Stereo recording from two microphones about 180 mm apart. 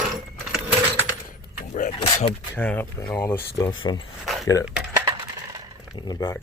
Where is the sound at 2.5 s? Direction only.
10° left (ahead or behind); by 4.0 s 25° left (ahead or behind).